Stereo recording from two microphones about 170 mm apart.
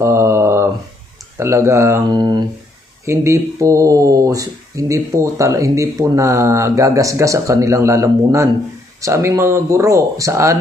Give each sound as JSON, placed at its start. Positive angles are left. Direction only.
{"t": 0.0, "sound": "mantra", "side_deg": -15}
{"t": 1.4, "sound": "speech", "side_deg": -15}